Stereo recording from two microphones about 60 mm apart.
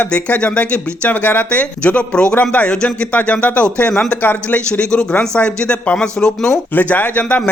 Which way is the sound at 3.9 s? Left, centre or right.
Centre.